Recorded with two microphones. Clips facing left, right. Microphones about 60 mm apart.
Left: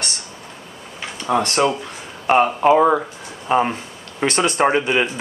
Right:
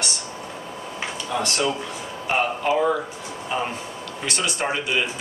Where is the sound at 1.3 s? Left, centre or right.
Left.